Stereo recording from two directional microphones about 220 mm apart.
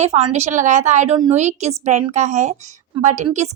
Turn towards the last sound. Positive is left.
turn(degrees=-30)  # may be behind; listen again after turning